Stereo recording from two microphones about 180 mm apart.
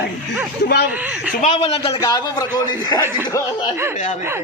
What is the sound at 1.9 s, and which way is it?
A man's voice, 20° left (ahead or behind).